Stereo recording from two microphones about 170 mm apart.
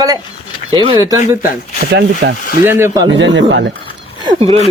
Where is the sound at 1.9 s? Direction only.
85° right.